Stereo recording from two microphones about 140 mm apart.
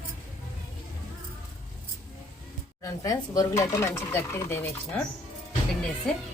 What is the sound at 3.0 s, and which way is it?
Speech, 25° left (ahead or behind).